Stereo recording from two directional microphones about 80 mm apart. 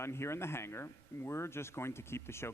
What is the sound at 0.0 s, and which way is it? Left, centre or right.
Speech, left.